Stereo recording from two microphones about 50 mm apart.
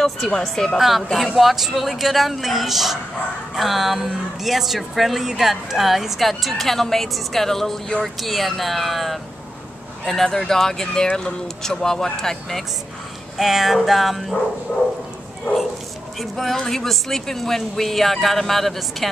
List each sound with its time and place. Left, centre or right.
0.4 s speech: centre
0.7 s a woman's voice: centre
13.4 s a woman's voice: centre
16.2 s a woman's voice: centre